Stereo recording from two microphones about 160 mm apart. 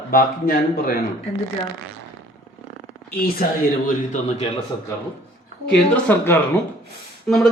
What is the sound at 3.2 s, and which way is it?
Speech, 70° left (ahead or behind).